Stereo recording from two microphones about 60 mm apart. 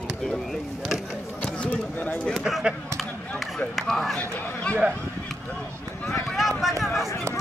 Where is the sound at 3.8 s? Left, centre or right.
Centre.